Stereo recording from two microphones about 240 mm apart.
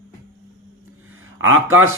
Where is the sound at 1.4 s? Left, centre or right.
Right.